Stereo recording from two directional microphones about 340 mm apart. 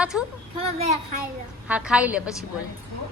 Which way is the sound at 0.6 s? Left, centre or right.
Centre.